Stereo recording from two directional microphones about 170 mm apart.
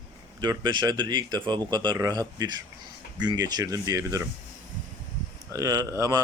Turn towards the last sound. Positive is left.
turn(degrees=-20)  # may be behind; listen again after turning